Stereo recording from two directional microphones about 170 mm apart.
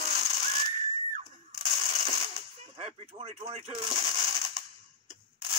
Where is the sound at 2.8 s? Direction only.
35° right (ahead or behind).